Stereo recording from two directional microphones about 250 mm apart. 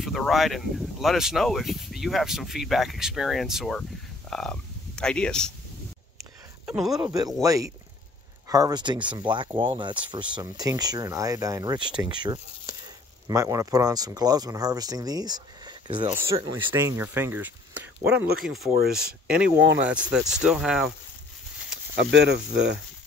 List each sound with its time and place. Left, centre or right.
0.0 s speech: centre
6.6 s speech: centre
7.0 s speech: centre
16.7 s speech: centre
22.1 s speech: right